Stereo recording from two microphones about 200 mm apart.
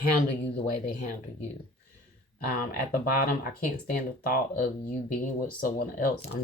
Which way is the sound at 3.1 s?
45° left (ahead or behind).